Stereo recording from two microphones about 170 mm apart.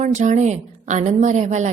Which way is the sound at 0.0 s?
45° right (ahead or behind).